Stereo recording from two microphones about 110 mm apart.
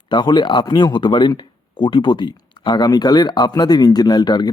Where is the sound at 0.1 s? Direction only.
45° left (ahead or behind).